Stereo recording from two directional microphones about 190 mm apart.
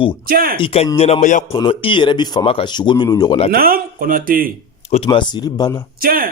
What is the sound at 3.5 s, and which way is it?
Speech, 50° right (ahead or behind).